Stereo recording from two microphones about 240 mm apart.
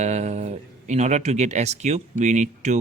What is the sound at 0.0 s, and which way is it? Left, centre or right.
Speech, right.